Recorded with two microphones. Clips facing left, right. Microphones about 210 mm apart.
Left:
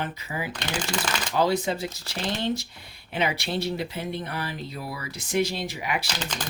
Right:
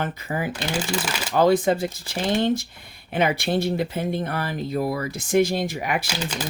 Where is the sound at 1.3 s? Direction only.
50° right (ahead or behind).